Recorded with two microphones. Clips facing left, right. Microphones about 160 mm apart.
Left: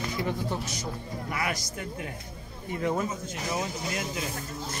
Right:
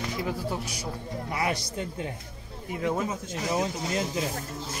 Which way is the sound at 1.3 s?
25° right (ahead or behind).